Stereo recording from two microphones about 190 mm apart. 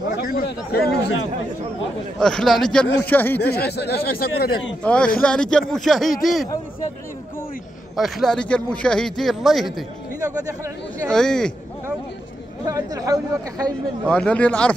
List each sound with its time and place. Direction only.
0.2 s speech: 50° left (ahead or behind)
2.1 s speech: 5° left (ahead or behind)
3.4 s speech: 55° left (ahead or behind)
4.8 s speech: 5° left (ahead or behind)
7.9 s speech: centre (ahead or behind)
10.2 s speech: 20° right (ahead or behind)
11.1 s speech: 5° left (ahead or behind)
12.6 s speech: 20° right (ahead or behind)
14.0 s a man's voice: 5° left (ahead or behind)